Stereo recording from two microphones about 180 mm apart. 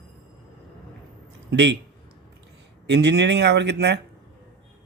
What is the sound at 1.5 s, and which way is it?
Speech, 70° right (ahead or behind).